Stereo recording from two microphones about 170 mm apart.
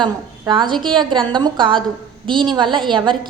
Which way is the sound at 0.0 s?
25° right (ahead or behind).